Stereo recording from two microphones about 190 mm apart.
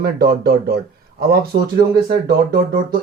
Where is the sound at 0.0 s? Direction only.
55° right (ahead or behind).